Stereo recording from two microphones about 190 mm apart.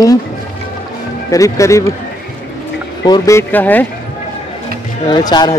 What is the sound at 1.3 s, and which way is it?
Speech, 15° left (ahead or behind).